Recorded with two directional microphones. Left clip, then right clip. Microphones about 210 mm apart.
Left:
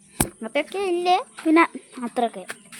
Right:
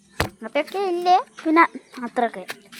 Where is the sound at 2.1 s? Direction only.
Centre (ahead or behind).